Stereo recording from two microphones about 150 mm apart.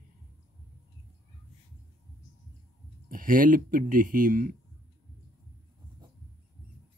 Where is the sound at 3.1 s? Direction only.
65° right (ahead or behind).